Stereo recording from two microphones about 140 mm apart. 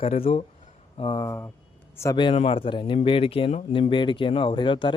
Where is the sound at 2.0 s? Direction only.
20° left (ahead or behind).